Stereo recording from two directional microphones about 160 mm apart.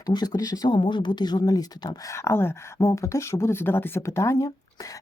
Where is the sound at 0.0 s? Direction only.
25° left (ahead or behind).